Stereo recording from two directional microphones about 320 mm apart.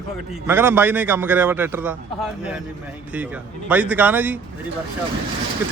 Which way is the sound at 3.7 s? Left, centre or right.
Centre.